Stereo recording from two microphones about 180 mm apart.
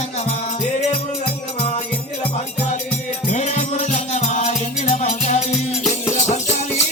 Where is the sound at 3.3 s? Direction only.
40° left (ahead or behind).